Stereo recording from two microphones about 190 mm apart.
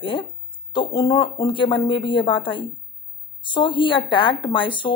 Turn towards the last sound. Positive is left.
turn(degrees=25)  # may be behind; listen again after turning